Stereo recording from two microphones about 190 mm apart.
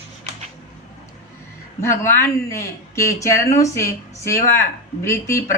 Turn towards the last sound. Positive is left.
turn(degrees=15)  # may be behind; listen again after turning